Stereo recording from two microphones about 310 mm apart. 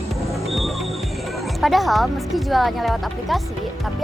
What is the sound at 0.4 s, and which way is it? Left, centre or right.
Music, centre.